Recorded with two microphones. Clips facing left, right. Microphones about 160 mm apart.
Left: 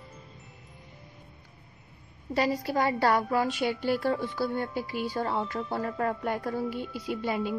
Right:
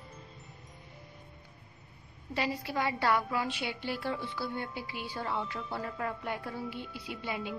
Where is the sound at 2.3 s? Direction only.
40° left (ahead or behind).